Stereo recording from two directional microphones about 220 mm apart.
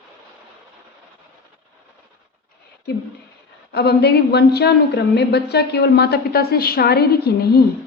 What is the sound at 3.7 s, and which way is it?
A woman's voice, 50° left (ahead or behind).